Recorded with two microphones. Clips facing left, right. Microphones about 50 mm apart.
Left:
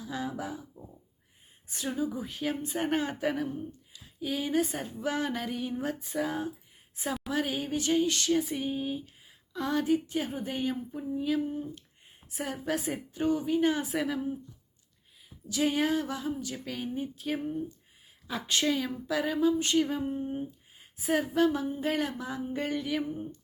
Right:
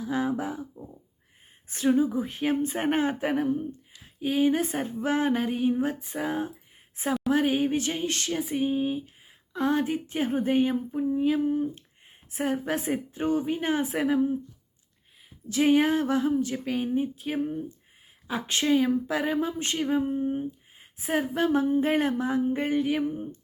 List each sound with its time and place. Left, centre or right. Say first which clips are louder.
0.0 s speech: right 7 dB; right
1.7 s speech: right 9 dB; right
8.4 s a sound: right 4 dB; right
9.5 s speech: right 2 dB; right
12.3 s speech: right 5 dB; right
15.4 s speech: right 6 dB; right; by 17.6 s centre
18.3 s a sound: right 2 dB; right
18.7 s speech: right 7 dB; right
19.8 s a sound: right 5 dB; right
20.1 s speech: right 5 dB; centre
20.4 s speech: right 4 dB; right